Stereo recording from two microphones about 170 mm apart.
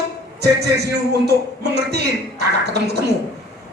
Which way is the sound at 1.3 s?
75° right (ahead or behind).